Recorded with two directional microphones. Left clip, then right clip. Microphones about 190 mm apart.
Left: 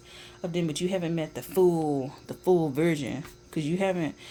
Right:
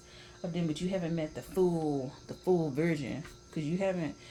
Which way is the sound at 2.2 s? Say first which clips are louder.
Left 6 dB; 45° left (ahead or behind).